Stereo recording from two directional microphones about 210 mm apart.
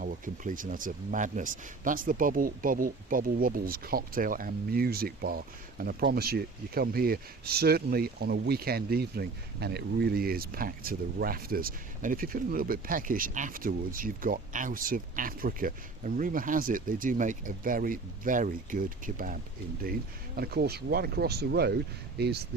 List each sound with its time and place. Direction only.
0.0 s speech: 40° right (ahead or behind)